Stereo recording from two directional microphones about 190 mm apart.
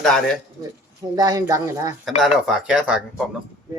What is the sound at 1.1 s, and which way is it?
Speech, 20° right (ahead or behind).